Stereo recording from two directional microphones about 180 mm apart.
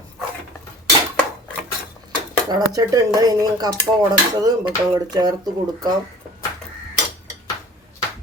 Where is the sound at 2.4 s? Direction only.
20° right (ahead or behind).